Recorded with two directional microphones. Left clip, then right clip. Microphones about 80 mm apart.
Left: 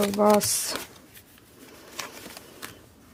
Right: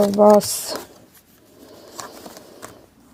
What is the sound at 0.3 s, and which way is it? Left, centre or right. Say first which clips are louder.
Speech: right 7 dB; right.